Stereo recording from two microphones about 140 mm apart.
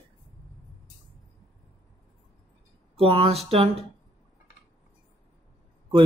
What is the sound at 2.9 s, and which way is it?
Speech, 40° right (ahead or behind).